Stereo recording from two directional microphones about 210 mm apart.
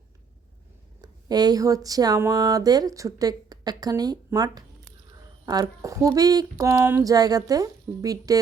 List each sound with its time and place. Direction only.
1.0 s speech: 20° right (ahead or behind)